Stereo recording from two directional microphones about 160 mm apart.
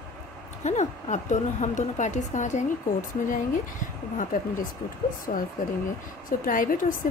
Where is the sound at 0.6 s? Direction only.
45° left (ahead or behind).